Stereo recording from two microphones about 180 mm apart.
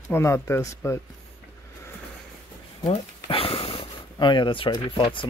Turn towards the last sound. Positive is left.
turn(degrees=25)  # may be behind; listen again after turning